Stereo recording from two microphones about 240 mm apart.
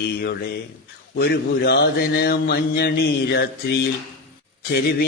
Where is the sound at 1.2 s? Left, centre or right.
Left.